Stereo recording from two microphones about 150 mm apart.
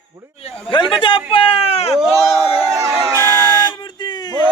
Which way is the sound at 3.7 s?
30° left (ahead or behind).